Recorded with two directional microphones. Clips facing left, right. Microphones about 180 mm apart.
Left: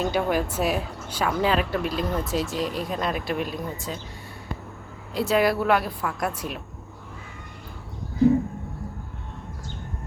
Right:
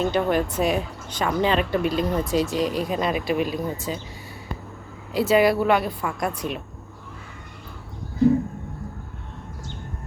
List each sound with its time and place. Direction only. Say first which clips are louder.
0.0 s speech: right 2 dB; 5° left (ahead or behind)
5.1 s speech: right 3 dB; centre (ahead or behind)